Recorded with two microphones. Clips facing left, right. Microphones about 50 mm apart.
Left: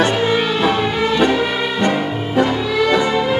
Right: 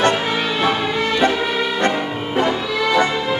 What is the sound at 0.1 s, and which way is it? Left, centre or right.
Music, centre.